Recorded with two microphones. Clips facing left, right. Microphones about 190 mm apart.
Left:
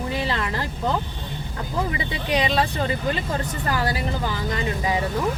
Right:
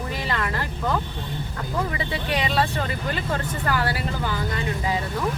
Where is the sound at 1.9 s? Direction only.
20° left (ahead or behind).